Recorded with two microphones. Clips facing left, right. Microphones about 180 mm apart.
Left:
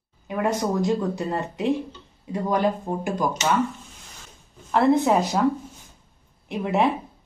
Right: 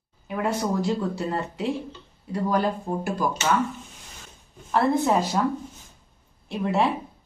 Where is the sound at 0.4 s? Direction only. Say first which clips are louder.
Left 2 dB; 15° left (ahead or behind).